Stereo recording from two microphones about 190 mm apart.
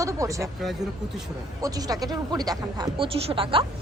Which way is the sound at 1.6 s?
20° right (ahead or behind).